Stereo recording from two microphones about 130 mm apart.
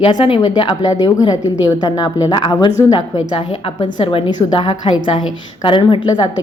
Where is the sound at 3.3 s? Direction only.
40° left (ahead or behind).